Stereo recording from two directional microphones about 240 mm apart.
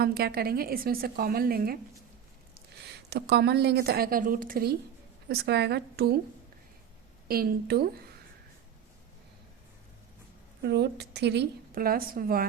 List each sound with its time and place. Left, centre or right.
0.0 s a woman's voice: right
7.3 s a woman's voice: right
10.6 s a woman's voice: right